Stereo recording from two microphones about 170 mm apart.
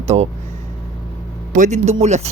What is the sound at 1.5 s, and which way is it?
Speech, 45° right (ahead or behind).